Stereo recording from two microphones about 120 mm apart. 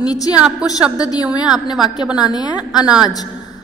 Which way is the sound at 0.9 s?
30° left (ahead or behind).